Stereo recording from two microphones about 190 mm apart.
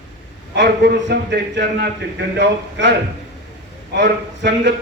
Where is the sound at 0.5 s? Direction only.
65° right (ahead or behind).